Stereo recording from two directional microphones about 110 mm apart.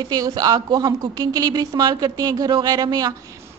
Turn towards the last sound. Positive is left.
turn(degrees=-40)  # may be behind; listen again after turning